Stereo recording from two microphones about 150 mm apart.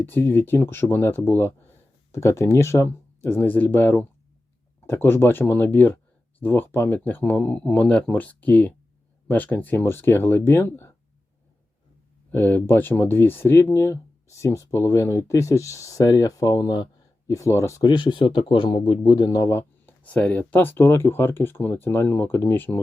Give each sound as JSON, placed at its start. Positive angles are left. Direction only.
{"t": 0.0, "sound": "speech", "side_deg": 15}
{"t": 12.3, "sound": "speech", "side_deg": 15}